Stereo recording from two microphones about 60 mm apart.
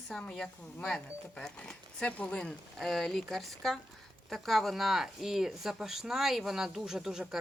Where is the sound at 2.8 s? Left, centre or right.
Centre.